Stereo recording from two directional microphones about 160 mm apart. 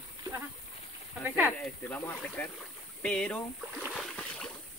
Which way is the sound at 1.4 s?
15° left (ahead or behind).